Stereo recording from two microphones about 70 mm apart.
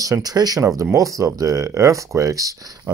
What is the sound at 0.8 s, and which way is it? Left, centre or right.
Speech, right.